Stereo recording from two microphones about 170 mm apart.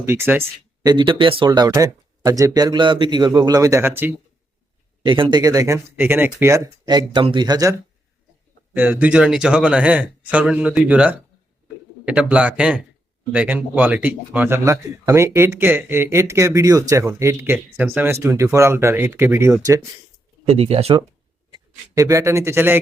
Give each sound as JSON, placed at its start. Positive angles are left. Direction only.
{"t": 0.0, "sound": "a man's voice", "side_deg": -15}
{"t": 0.9, "sound": "speech", "side_deg": -30}
{"t": 5.0, "sound": "speech", "side_deg": -30}
{"t": 8.7, "sound": "a man's voice", "side_deg": -10}
{"t": 20.5, "sound": "speech", "side_deg": -35}
{"t": 21.5, "sound": "speech", "side_deg": -20}